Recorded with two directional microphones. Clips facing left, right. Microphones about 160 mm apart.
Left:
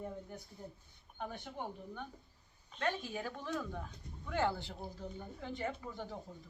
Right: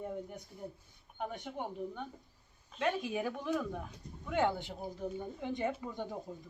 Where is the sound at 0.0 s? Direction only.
15° right (ahead or behind).